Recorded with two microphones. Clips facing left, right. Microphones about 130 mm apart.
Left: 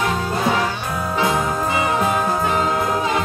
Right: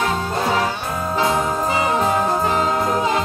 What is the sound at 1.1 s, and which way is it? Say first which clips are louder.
Music: right 1 dB; 25° right (ahead or behind).